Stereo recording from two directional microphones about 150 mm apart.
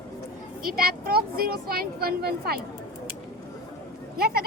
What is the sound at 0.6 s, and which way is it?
Speech, 80° right.